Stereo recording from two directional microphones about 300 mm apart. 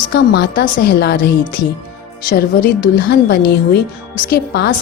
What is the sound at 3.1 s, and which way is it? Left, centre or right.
A woman's voice, left.